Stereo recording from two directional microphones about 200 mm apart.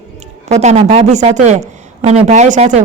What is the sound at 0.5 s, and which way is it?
Speech, 35° right (ahead or behind).